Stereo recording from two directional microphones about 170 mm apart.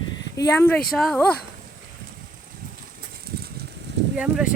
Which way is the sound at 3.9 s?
90° right.